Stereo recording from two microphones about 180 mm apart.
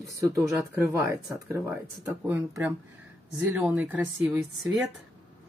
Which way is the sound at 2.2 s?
10° right (ahead or behind).